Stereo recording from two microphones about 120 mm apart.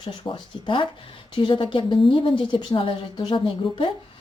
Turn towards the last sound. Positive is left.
turn(degrees=40)  # may be behind; listen again after turning